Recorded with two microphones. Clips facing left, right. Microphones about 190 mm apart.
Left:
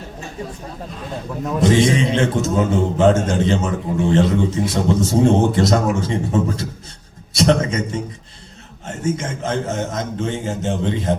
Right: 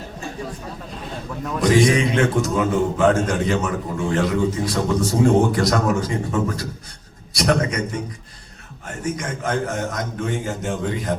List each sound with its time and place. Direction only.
1.5 s a man's voice: 25° left (ahead or behind)